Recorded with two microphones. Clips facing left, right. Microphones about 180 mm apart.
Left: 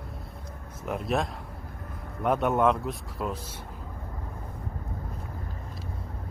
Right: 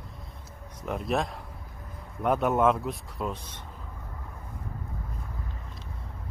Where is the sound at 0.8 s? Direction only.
Centre (ahead or behind).